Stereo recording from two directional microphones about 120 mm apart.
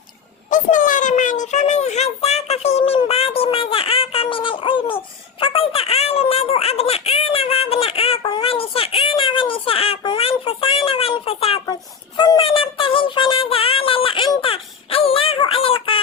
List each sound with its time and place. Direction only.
0.5 s a sound: 90° left; by 11.6 s 50° left (ahead or behind)
11.6 s child singing: 35° left (ahead or behind)
14.3 s synthetic singing: 50° left (ahead or behind)